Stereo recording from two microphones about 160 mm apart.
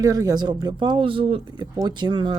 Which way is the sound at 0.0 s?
25° right (ahead or behind).